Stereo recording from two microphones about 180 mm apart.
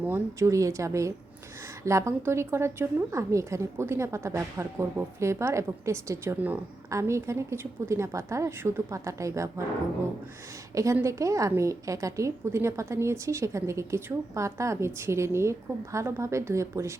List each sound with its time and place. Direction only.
0.0 s a woman's voice: 15° right (ahead or behind)
10.8 s a woman's voice: 15° right (ahead or behind)